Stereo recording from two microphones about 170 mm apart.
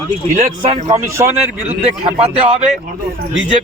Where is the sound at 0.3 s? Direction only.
40° right (ahead or behind).